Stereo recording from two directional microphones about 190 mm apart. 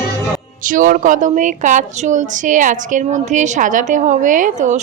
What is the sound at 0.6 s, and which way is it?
A woman's voice, 45° right (ahead or behind).